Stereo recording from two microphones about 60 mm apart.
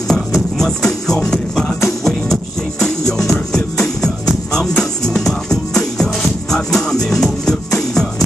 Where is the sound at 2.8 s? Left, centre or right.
Centre.